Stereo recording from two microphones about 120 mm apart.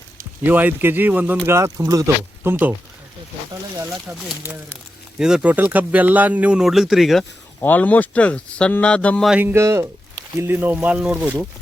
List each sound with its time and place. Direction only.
0.4 s speech: 15° right (ahead or behind)
3.8 s speech: 25° right (ahead or behind)
5.2 s speech: 10° right (ahead or behind)
7.6 s speech: 15° left (ahead or behind)
9.4 s speech: 20° right (ahead or behind)